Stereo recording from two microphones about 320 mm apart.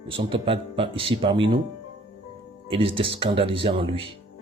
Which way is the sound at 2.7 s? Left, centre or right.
Centre.